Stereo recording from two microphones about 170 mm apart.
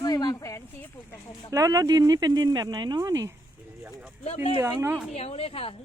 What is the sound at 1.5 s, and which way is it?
Speech, 20° right (ahead or behind).